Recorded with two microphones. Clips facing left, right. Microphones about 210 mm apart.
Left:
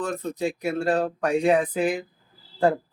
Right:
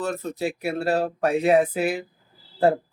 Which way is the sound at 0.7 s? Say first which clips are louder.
Even; 30° right (ahead or behind).